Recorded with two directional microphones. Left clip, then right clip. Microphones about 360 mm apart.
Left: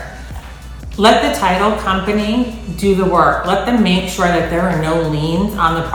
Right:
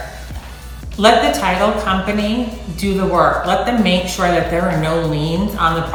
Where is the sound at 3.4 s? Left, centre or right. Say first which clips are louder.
Left 1 dB; centre.